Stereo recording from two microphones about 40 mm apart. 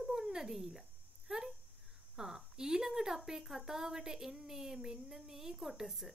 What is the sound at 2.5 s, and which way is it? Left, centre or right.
A woman's voice, centre.